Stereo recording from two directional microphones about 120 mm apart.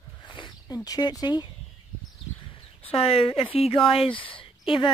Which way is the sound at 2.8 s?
55° left (ahead or behind).